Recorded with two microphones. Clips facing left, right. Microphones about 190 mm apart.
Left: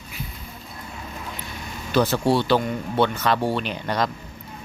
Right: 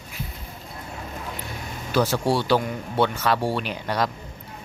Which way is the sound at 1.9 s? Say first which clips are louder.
Left 2 dB; 10° right (ahead or behind).